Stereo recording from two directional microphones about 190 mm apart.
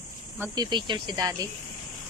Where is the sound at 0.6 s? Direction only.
25° right (ahead or behind).